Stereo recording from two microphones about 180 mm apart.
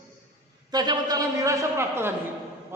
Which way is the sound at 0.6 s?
20° right (ahead or behind).